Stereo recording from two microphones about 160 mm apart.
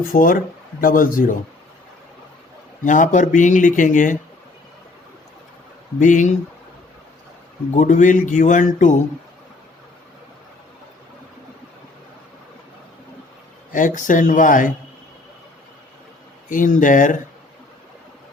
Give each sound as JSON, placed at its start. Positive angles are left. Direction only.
{"t": 0.0, "sound": "speech", "side_deg": 60}
{"t": 2.8, "sound": "speech", "side_deg": 50}
{"t": 6.0, "sound": "speech", "side_deg": 50}
{"t": 7.7, "sound": "speech", "side_deg": 50}
{"t": 13.7, "sound": "speech", "side_deg": 55}
{"t": 16.5, "sound": "speech", "side_deg": 55}